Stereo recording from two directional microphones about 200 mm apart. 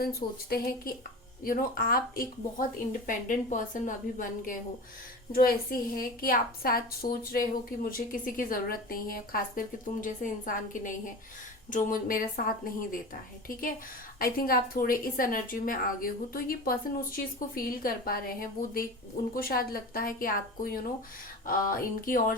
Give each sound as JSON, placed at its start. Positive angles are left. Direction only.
{"t": 0.5, "sound": "a woman's voice", "side_deg": 50}
{"t": 13.5, "sound": "a woman's voice", "side_deg": 45}